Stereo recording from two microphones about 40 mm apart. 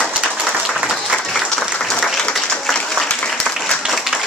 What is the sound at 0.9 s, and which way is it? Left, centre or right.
Applause, centre.